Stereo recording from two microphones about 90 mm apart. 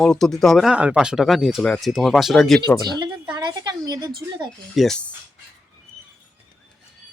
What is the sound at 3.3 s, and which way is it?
Speech, 45° right (ahead or behind).